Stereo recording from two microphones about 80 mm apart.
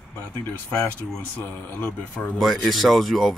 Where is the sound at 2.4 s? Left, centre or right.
Centre.